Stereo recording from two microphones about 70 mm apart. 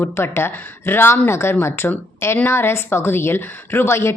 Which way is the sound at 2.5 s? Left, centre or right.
Left.